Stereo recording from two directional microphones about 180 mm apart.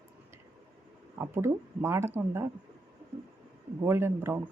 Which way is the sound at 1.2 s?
15° right (ahead or behind).